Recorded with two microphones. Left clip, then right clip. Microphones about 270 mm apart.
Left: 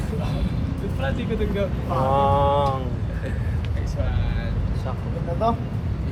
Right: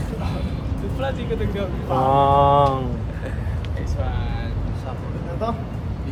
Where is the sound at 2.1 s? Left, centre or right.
Right.